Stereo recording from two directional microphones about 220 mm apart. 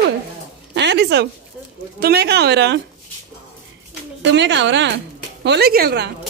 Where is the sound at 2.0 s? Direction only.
45° right (ahead or behind).